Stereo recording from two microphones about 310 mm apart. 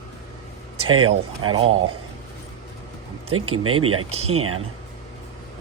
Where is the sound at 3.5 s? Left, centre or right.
Right.